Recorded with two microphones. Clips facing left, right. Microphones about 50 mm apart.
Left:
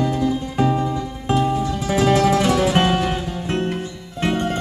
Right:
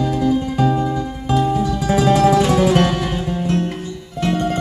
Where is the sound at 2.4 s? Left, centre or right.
Right.